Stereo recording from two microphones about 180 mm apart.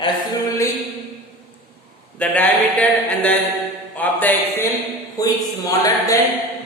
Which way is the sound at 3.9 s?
10° left (ahead or behind).